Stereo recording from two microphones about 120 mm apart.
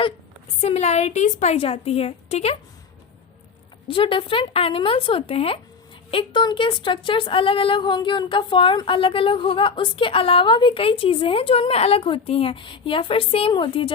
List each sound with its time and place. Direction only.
0.6 s a woman's voice: 65° left (ahead or behind)
3.8 s a woman's voice: 50° left (ahead or behind)